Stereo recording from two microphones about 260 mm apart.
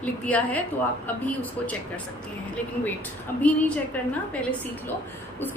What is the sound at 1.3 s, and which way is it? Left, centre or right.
Speech, centre.